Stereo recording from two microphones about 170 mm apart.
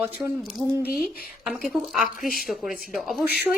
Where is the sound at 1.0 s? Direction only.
Centre (ahead or behind).